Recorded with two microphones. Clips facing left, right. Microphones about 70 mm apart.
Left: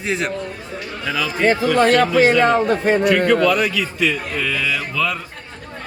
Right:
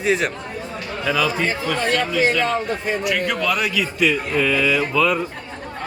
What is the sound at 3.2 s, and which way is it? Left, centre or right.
Speech, centre.